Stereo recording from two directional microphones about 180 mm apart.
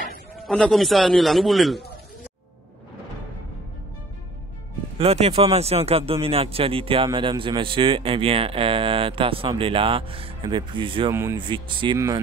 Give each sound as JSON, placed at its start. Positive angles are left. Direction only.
{"t": 0.4, "sound": "a man's voice", "side_deg": 0}
{"t": 4.9, "sound": "speech", "side_deg": -35}